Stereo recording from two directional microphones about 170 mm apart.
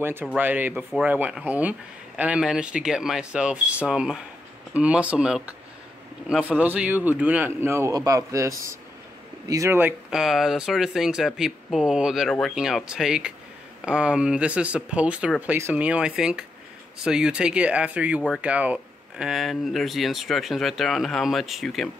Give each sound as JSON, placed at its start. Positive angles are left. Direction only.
{"t": 0.0, "sound": "speech", "side_deg": -10}